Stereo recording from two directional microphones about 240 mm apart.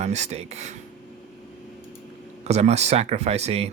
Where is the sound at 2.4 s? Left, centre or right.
Right.